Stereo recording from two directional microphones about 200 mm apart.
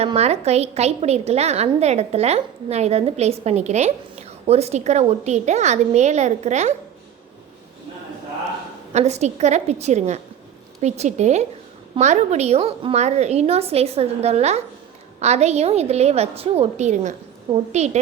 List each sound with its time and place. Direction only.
0.0 s a woman's voice: 30° right (ahead or behind)
8.9 s a woman's voice: 35° right (ahead or behind)